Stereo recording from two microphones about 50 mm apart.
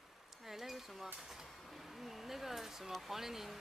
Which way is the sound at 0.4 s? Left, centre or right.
Centre.